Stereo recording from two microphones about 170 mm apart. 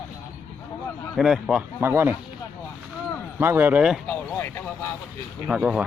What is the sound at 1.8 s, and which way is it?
Speech, 15° right (ahead or behind).